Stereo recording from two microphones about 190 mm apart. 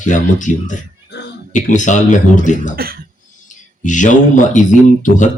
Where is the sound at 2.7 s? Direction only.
50° right (ahead or behind).